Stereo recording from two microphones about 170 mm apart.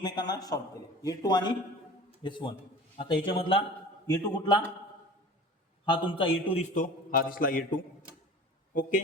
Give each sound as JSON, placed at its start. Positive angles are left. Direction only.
{"t": 0.0, "sound": "a man's voice", "side_deg": 25}
{"t": 5.8, "sound": "a man's voice", "side_deg": 30}
{"t": 6.7, "sound": "a man's voice", "side_deg": 55}